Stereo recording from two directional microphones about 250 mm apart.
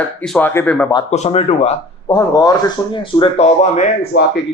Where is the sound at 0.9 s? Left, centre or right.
Left.